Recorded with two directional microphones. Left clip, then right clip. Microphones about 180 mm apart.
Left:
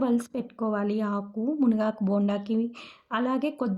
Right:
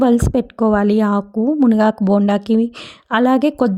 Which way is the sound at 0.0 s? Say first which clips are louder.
Right 13 dB; 45° right (ahead or behind).